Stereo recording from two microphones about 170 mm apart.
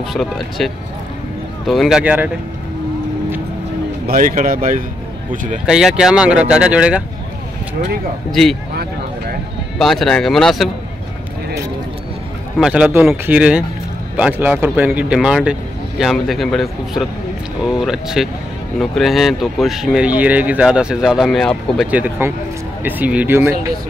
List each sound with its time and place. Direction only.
0.1 s speech: centre (ahead or behind)
1.7 s speech: centre (ahead or behind)
4.1 s speech: 50° right (ahead or behind)
5.7 s speech: 5° right (ahead or behind)
8.3 s speech: centre (ahead or behind)
9.8 s speech: centre (ahead or behind)
12.5 s speech: 5° right (ahead or behind)
21.9 s speech: 10° right (ahead or behind)